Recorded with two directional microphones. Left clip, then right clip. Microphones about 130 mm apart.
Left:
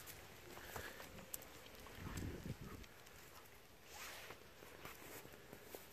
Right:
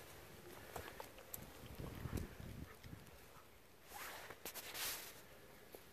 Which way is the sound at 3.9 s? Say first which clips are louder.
Right 2 dB; 75° right (ahead or behind).